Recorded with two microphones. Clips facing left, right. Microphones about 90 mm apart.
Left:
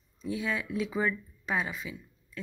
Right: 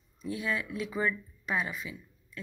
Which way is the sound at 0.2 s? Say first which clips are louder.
Left 1 dB; 25° left (ahead or behind).